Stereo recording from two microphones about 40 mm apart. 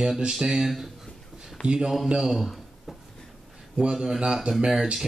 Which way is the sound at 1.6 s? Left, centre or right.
Centre.